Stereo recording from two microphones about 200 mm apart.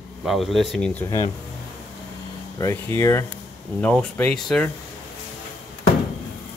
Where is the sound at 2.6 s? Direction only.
15° left (ahead or behind).